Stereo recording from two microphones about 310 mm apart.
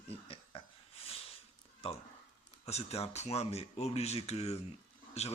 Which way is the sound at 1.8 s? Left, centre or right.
Centre.